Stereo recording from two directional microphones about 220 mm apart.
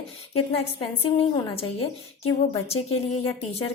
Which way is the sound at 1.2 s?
25° left (ahead or behind).